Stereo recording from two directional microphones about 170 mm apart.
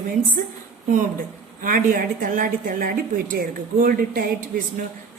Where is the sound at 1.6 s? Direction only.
55° right (ahead or behind).